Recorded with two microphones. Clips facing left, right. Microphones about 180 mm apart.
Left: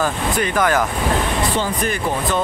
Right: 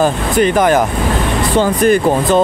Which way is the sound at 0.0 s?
25° right (ahead or behind).